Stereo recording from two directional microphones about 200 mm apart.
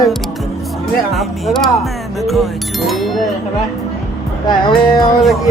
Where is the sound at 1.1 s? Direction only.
Centre (ahead or behind).